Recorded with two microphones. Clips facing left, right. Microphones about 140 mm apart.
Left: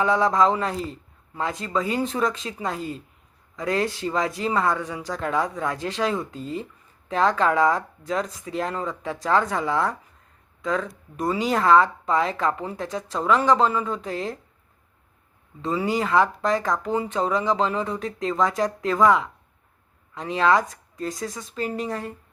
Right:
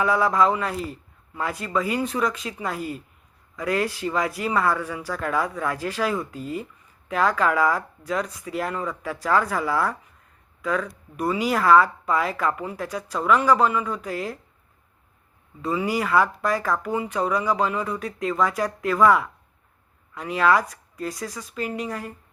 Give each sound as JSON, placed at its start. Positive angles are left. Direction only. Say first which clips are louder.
{"t": 0.0, "sound": "speech", "louder": "left 1 dB", "side_deg": 25}
{"t": 15.6, "sound": "speech", "louder": "even", "side_deg": 25}